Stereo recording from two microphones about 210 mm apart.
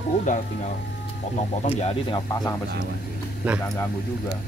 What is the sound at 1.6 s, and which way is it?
Speech, 30° left (ahead or behind).